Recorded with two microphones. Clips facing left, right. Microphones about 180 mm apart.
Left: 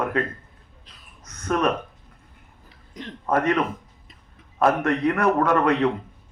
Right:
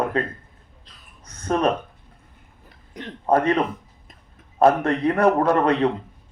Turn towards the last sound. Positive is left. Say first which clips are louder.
# right 1 dB
turn(degrees=-30)  # may be behind; listen again after turning